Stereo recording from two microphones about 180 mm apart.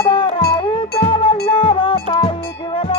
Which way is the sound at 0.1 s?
30° left (ahead or behind).